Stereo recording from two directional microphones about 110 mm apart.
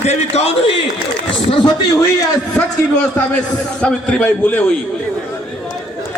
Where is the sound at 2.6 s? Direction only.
10° left (ahead or behind).